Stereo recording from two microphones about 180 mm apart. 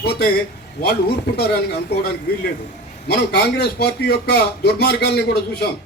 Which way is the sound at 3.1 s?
65° left (ahead or behind).